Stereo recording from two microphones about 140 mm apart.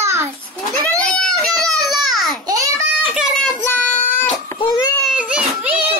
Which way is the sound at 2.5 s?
25° right (ahead or behind).